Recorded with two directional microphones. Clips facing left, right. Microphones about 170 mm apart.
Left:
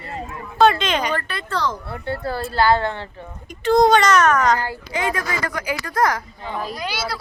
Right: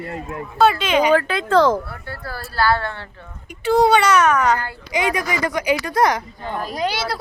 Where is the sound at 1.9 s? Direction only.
25° left (ahead or behind).